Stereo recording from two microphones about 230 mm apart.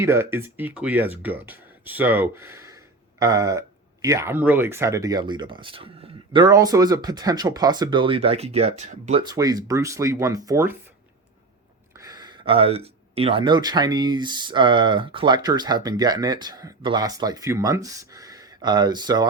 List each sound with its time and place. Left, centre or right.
0.0 s speech: centre; by 9.2 s right
9.3 s speech: centre
11.9 s speech: centre